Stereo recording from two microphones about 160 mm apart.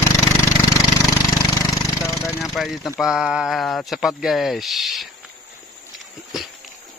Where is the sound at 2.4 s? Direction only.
Centre (ahead or behind).